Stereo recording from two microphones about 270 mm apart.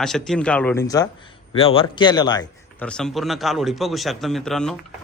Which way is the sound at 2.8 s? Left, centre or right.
Centre.